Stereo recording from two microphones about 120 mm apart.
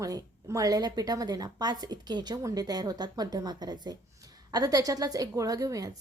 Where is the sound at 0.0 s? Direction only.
25° right (ahead or behind).